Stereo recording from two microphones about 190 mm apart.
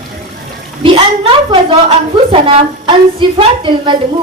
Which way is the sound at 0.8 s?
30° right (ahead or behind).